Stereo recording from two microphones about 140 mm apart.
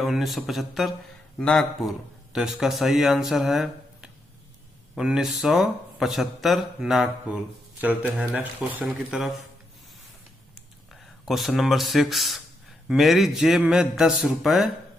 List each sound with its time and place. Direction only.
0.0 s speech: centre (ahead or behind)
11.2 s speech: centre (ahead or behind)